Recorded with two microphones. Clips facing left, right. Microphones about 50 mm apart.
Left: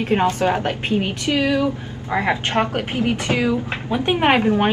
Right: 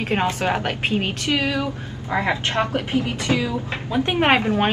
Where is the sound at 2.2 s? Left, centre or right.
Left.